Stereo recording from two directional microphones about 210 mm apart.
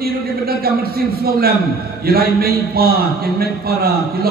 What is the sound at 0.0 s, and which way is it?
A man's voice, 45° right (ahead or behind).